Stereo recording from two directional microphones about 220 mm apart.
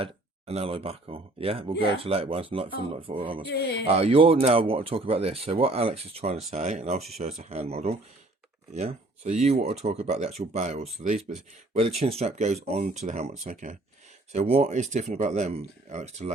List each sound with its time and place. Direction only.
0.0 s speech: 25° right (ahead or behind)
3.5 s speech: 50° left (ahead or behind)
3.8 s speech: 25° right (ahead or behind)